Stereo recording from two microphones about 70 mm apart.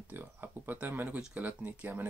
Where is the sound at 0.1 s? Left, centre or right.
Right.